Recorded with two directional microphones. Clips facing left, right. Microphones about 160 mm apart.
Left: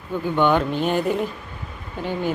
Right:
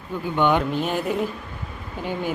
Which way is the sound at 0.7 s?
Centre (ahead or behind).